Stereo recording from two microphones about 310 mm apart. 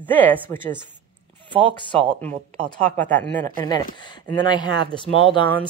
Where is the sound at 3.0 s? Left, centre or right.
Centre.